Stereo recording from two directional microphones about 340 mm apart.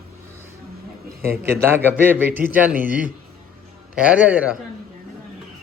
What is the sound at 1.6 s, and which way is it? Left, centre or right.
Speech, centre.